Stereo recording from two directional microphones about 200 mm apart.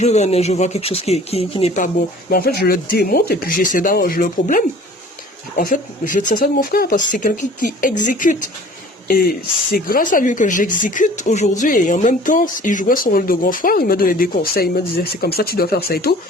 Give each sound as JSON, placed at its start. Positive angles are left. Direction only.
{"t": 0.0, "sound": "speech", "side_deg": 35}
{"t": 2.3, "sound": "speech", "side_deg": 50}